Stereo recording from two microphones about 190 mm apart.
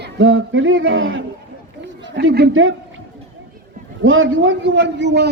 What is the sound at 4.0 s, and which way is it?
A man's voice, 90° right.